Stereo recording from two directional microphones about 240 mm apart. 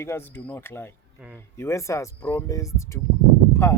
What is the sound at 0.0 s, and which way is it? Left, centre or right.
Speech, centre.